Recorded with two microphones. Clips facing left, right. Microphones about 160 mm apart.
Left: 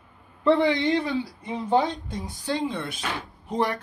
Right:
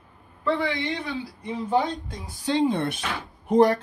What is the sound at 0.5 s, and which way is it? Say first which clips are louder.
Speech: left 6 dB; 20° left (ahead or behind).